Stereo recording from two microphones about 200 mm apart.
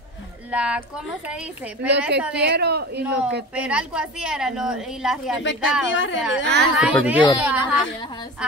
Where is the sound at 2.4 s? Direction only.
55° right (ahead or behind).